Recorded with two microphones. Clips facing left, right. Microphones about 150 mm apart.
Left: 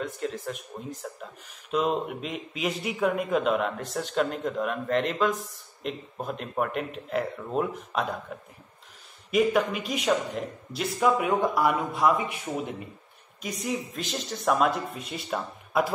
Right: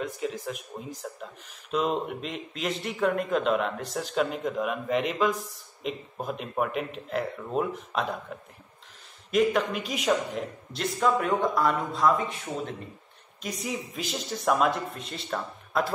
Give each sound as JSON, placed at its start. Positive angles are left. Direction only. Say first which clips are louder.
{"t": 0.0, "sound": "speech", "louder": "even", "side_deg": -5}
{"t": 13.4, "sound": "speech", "louder": "left 2 dB", "side_deg": 0}